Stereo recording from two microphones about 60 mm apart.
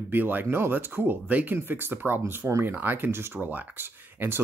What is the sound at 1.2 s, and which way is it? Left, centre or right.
Speech, right.